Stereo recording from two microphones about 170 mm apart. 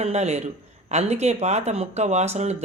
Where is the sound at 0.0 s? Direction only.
40° right (ahead or behind).